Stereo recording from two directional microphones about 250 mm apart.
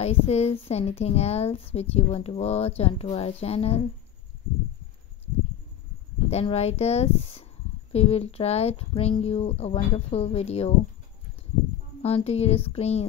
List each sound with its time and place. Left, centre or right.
0.0 s speech: left
6.3 s speech: left
12.0 s speech: left